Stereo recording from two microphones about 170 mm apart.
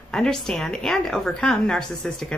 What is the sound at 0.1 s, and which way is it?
Speech, 5° left (ahead or behind).